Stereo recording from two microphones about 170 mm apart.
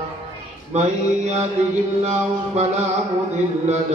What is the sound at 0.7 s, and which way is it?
Music, 40° right (ahead or behind).